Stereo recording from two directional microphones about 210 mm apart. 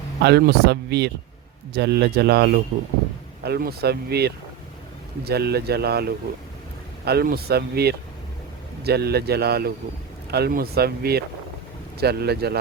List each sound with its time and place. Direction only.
0.2 s speech: 50° right (ahead or behind)